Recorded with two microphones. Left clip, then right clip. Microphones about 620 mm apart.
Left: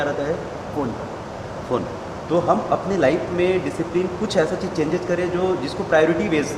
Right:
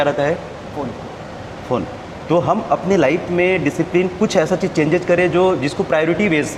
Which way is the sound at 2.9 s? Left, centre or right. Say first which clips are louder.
Right 2 dB; right.